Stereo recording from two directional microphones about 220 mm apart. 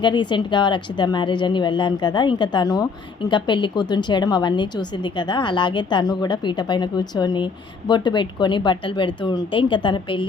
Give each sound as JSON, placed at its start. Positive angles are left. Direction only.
{"t": 0.0, "sound": "a woman's voice", "side_deg": 20}